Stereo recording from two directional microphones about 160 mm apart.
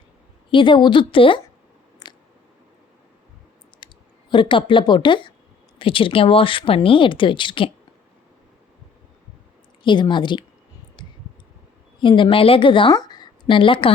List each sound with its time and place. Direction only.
0.5 s speech: 30° left (ahead or behind)
2.0 s chewing: 25° left (ahead or behind)
3.8 s clicking: 30° left (ahead or behind)
4.3 s speech: 30° left (ahead or behind)
9.8 s speech: 30° left (ahead or behind)
11.0 s clicking: 30° left (ahead or behind)
11.9 s a woman's voice: 30° left (ahead or behind)